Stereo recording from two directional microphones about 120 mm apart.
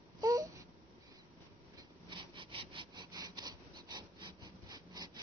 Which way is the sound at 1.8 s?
40° right (ahead or behind).